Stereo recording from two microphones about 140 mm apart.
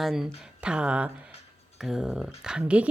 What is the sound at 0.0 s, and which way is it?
Speech, centre (ahead or behind).